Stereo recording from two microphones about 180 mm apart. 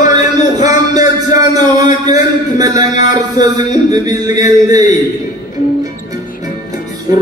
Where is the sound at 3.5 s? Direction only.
20° right (ahead or behind).